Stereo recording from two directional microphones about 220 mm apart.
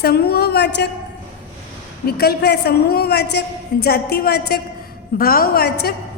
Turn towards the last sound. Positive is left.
turn(degrees=45)  # may be behind; listen again after turning